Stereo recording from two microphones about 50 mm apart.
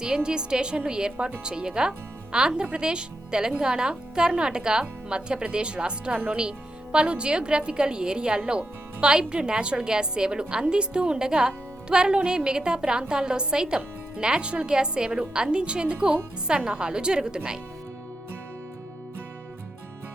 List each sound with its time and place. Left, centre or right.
0.0 s a woman's voice: centre